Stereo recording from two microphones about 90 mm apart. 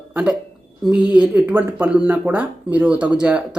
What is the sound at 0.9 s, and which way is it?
A woman's voice, 10° right (ahead or behind).